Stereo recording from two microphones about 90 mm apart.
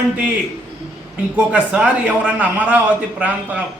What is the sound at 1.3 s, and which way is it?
A man's voice, 15° right (ahead or behind).